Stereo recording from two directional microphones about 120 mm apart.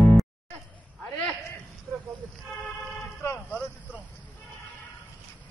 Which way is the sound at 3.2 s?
20° left (ahead or behind).